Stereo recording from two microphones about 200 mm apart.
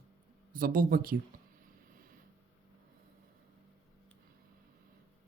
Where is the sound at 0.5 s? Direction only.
45° right (ahead or behind).